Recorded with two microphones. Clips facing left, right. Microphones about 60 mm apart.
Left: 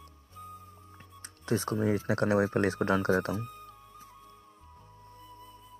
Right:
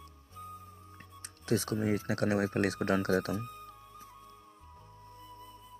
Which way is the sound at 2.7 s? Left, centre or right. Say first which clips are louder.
Left 2 dB; left.